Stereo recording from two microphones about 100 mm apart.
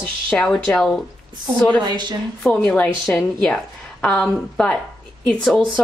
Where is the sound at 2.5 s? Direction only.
15° left (ahead or behind).